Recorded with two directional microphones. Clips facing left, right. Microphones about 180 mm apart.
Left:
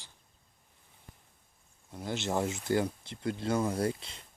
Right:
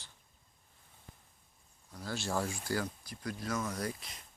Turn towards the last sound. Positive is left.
turn(degrees=30)  # may be behind; listen again after turning